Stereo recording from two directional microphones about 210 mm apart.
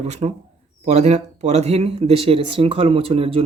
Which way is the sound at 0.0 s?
30° right (ahead or behind).